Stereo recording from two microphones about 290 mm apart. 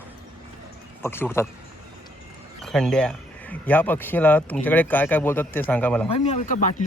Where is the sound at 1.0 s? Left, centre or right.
Centre.